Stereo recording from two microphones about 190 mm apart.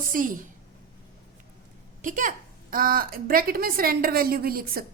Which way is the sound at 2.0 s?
45° right (ahead or behind).